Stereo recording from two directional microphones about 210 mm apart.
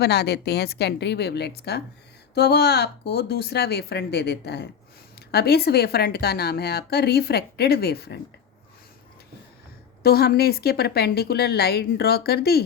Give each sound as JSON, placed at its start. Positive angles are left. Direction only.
{"t": 0.0, "sound": "speech", "side_deg": 50}
{"t": 10.0, "sound": "speech", "side_deg": 45}